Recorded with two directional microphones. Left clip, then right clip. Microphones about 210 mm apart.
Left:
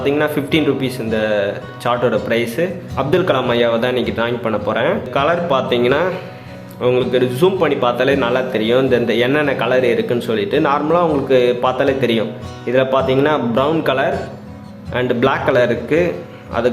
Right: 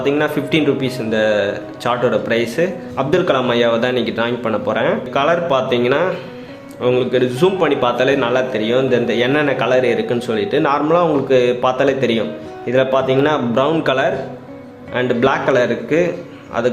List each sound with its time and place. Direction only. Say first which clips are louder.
0.0 s speech: even; centre (ahead or behind)